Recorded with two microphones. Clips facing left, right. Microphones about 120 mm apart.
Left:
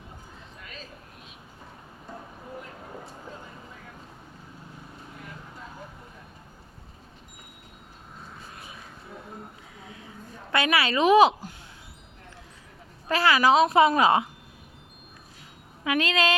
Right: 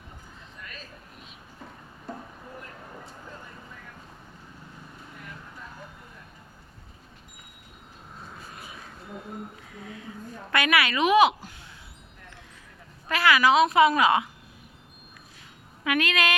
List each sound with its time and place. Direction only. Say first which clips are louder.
2.6 s vehicle: left 3 dB; 15° left (ahead or behind)
5.1 s vehicle: even; 20° left (ahead or behind)
10.5 s a woman's voice: even; 30° left (ahead or behind)
13.1 s a woman's voice: left 1 dB; 35° left (ahead or behind)
15.8 s speech: left 1 dB; 25° left (ahead or behind)